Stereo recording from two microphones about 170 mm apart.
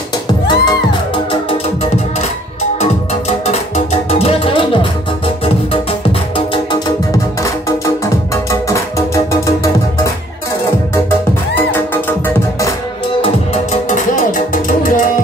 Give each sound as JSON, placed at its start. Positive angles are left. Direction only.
{"t": 0.5, "sound": "music", "side_deg": 25}
{"t": 2.8, "sound": "music", "side_deg": 40}
{"t": 6.3, "sound": "music", "side_deg": 30}
{"t": 7.1, "sound": "music", "side_deg": 20}
{"t": 11.1, "sound": "music", "side_deg": 10}
{"t": 13.2, "sound": "music", "side_deg": 45}